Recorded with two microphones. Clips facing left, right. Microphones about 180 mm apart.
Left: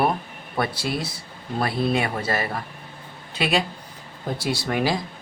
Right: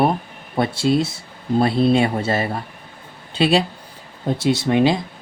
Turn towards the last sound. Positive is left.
turn(degrees=-25)  # may be behind; listen again after turning